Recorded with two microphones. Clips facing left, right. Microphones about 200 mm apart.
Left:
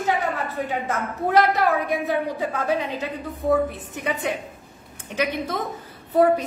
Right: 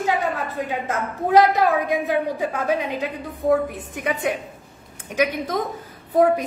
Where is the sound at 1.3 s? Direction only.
15° right (ahead or behind).